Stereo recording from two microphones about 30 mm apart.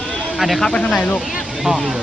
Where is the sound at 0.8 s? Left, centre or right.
Left.